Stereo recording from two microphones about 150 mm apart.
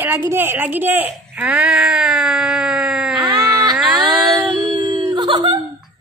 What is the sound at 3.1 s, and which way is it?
Baby cry, 25° right (ahead or behind).